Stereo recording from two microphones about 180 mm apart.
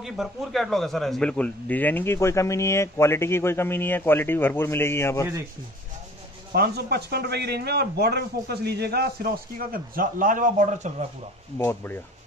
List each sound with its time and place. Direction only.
0.0 s a man's voice: centre (ahead or behind); by 5.3 s 15° left (ahead or behind)
6.5 s a man's voice: 60° right (ahead or behind); by 11.1 s 40° right (ahead or behind)
11.5 s a man's voice: 15° left (ahead or behind)